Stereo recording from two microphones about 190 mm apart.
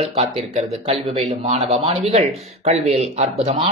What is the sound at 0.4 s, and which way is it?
Speech, 30° right (ahead or behind).